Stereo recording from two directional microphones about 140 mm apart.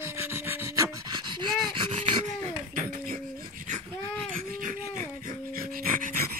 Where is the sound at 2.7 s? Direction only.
80° right.